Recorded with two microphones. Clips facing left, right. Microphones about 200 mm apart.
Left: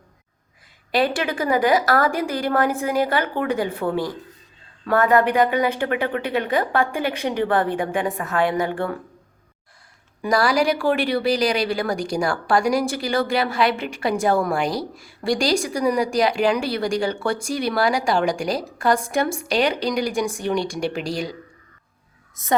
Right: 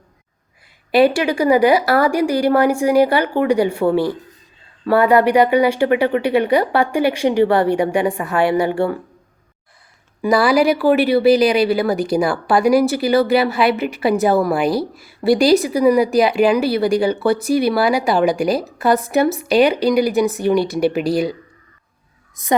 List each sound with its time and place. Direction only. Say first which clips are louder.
0.9 s speech: right 7 dB; 10° right (ahead or behind)
4.9 s speech: right 5 dB; 10° right (ahead or behind)
10.2 s speech: right 5 dB; 10° right (ahead or behind)
22.4 s speech: right 5 dB; 15° right (ahead or behind)